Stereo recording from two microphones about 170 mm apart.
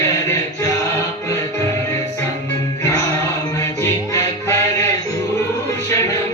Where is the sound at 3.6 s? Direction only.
15° left (ahead or behind).